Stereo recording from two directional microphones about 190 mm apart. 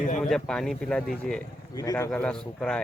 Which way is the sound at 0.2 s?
Centre (ahead or behind).